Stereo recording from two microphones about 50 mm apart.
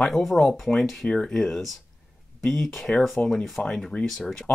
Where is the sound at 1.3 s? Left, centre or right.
Centre.